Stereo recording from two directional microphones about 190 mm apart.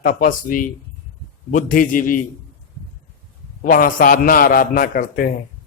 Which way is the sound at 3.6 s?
45° left (ahead or behind).